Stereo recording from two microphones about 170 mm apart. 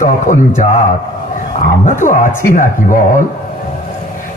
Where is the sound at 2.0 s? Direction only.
50° left (ahead or behind).